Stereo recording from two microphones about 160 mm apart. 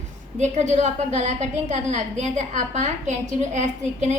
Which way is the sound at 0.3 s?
45° right (ahead or behind).